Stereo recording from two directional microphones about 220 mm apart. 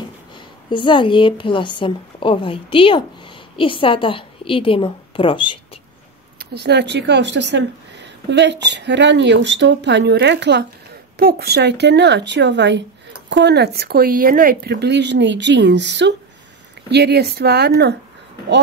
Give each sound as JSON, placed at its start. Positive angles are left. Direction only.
{"t": 0.7, "sound": "a woman's voice", "side_deg": 20}
{"t": 6.5, "sound": "a woman's voice", "side_deg": -50}